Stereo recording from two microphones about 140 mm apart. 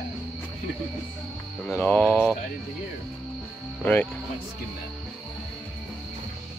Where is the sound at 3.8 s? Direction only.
15° left (ahead or behind).